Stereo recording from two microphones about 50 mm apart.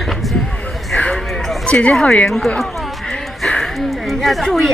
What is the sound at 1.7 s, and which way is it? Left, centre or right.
Speech, left.